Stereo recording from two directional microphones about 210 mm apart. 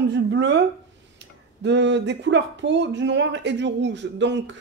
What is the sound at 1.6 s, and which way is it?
Speech, 55° right (ahead or behind).